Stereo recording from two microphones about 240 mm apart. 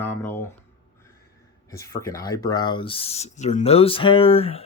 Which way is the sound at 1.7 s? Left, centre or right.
Centre.